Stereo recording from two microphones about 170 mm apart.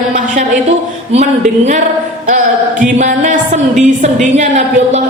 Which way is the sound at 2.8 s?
45° right (ahead or behind).